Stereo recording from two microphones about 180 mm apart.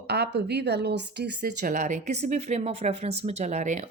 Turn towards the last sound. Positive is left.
turn(degrees=-40)  # may be behind; listen again after turning